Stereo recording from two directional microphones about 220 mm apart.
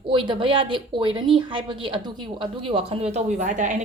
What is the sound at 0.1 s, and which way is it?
A woman's voice, 20° right (ahead or behind).